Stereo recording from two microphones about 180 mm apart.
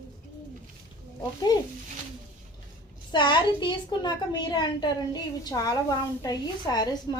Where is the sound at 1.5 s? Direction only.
20° left (ahead or behind).